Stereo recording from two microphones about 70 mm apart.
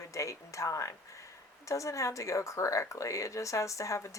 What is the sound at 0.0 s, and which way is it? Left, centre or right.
Speech, left.